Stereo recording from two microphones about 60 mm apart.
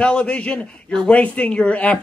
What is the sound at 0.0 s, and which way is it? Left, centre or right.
A woman's voice, centre.